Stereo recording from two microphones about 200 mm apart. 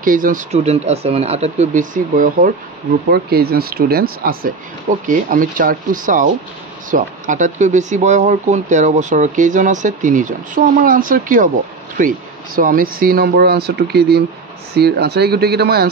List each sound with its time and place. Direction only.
0.0 s speech: 45° right (ahead or behind)
12.5 s speech: 45° right (ahead or behind)